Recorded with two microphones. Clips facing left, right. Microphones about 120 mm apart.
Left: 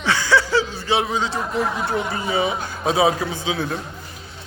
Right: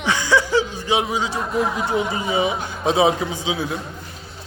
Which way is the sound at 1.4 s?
Centre (ahead or behind).